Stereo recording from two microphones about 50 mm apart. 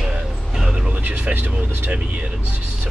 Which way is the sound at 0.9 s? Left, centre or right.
Right.